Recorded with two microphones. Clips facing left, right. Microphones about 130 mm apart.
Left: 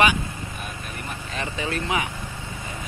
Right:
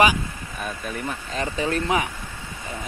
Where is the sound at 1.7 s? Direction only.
40° right (ahead or behind).